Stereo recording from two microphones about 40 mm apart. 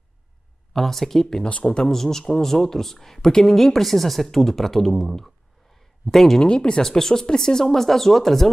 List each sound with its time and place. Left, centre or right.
0.7 s speech: centre
1.4 s speech: left
1.8 s speech: centre
5.8 s a sound: centre
6.4 s speech: left
6.8 s speech: centre